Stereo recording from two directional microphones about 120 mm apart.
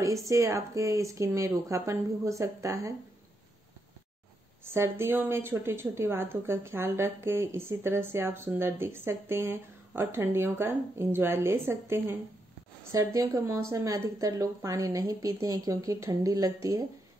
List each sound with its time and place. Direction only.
0.3 s a woman's voice: 25° right (ahead or behind)
4.7 s a woman's voice: 20° right (ahead or behind)